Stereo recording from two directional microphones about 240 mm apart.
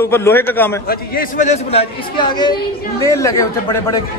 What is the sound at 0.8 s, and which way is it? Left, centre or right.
A man's voice, left.